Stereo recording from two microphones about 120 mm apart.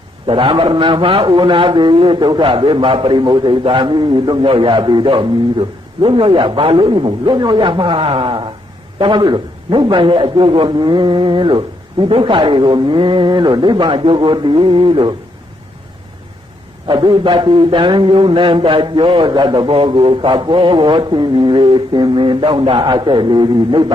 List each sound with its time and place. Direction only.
0.3 s a man's voice: 45° right (ahead or behind)
16.8 s a man's voice: 40° right (ahead or behind)